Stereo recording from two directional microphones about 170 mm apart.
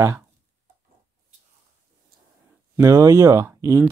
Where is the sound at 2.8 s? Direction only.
20° right (ahead or behind).